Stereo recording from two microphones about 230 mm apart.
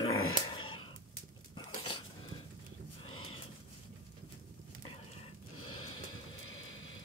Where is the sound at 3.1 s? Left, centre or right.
Left.